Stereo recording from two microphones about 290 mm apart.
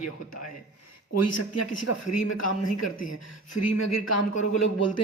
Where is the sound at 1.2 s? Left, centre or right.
Left.